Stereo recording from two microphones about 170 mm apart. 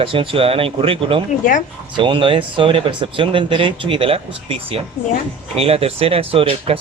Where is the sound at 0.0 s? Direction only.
30° right (ahead or behind).